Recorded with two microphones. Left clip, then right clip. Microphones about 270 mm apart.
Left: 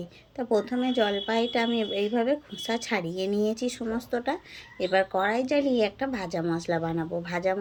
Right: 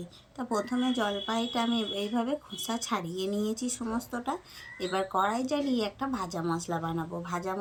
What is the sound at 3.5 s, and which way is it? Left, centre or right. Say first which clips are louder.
Speech: left 5 dB; centre.